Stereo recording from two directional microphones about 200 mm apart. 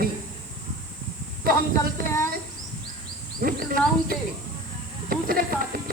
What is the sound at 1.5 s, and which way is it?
Speech, 50° right (ahead or behind).